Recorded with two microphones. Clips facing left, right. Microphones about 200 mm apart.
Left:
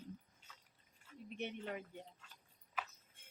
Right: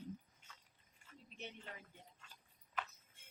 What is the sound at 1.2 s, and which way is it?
Speech, 60° left (ahead or behind).